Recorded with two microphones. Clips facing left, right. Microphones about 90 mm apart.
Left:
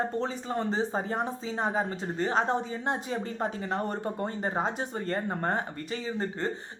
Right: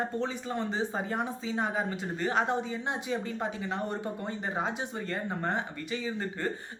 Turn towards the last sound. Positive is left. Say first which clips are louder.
# left 2 dB
turn(degrees=45)  # may be behind; listen again after turning